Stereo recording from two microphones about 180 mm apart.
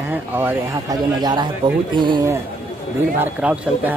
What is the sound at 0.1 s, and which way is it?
Speech, 10° right (ahead or behind).